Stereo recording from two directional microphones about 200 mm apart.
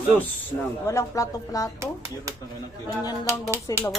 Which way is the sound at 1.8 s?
15° right (ahead or behind).